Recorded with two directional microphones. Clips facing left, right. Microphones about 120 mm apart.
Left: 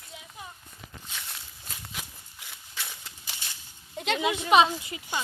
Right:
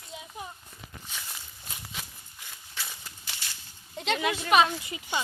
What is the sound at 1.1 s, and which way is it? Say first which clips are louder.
Walk: even; centre (ahead or behind).